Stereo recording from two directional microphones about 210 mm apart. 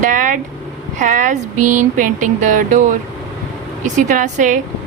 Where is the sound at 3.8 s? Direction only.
35° right (ahead or behind).